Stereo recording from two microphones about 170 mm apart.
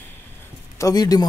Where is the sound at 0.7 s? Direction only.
20° left (ahead or behind).